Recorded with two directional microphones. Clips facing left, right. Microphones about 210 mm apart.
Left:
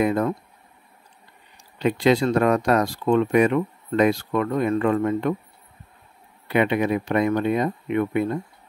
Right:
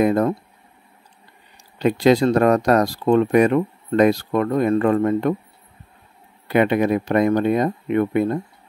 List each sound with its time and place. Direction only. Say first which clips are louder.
0.0 s speech: right 4 dB; 40° right (ahead or behind)
1.8 s speech: right 4 dB; 40° right (ahead or behind)
6.4 s speech: right 3 dB; 40° right (ahead or behind)